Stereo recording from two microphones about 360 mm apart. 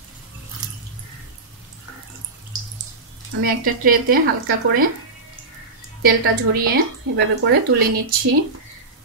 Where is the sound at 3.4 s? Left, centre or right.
Right.